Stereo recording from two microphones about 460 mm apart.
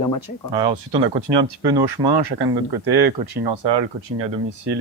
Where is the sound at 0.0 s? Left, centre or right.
Left.